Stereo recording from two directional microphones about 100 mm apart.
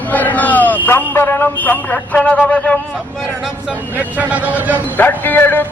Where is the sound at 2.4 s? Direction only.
15° left (ahead or behind).